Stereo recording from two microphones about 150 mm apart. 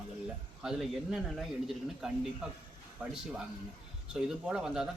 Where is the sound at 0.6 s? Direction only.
Centre (ahead or behind).